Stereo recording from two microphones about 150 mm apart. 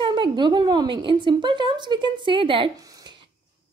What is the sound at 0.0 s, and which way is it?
A woman's voice, 30° right (ahead or behind).